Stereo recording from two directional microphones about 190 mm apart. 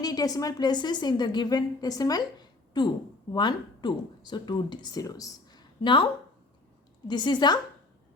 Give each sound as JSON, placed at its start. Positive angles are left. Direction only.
{"t": 0.0, "sound": "a woman's voice", "side_deg": 20}
{"t": 7.1, "sound": "a woman's voice", "side_deg": 25}